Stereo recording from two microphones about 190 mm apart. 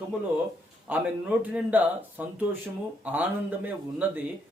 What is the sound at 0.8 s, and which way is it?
Speech, 10° right (ahead or behind).